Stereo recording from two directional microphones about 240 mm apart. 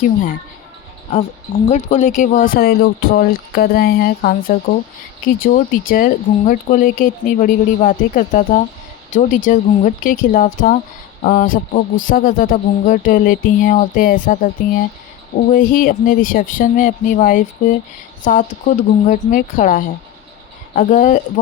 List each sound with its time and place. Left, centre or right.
1.7 s speech: left